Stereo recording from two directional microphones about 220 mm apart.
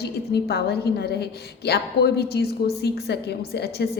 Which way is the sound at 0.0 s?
45° left (ahead or behind).